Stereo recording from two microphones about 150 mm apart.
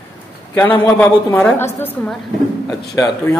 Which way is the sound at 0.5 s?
10° left (ahead or behind).